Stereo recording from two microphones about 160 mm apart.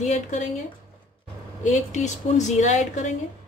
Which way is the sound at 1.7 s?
50° left (ahead or behind).